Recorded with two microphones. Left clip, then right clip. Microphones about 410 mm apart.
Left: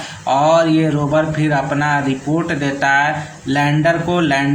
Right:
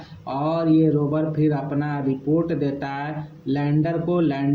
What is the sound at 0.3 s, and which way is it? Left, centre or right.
Speech, right.